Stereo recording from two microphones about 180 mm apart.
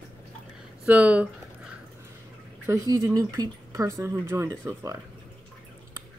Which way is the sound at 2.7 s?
20° right (ahead or behind).